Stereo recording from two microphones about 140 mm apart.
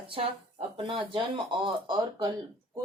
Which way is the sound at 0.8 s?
40° right (ahead or behind).